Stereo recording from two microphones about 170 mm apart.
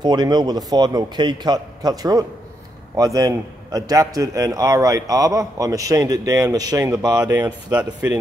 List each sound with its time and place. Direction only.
0.0 s a man's voice: 25° right (ahead or behind)